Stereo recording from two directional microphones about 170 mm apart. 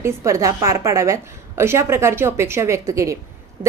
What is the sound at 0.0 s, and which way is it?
A woman's voice, 20° right (ahead or behind).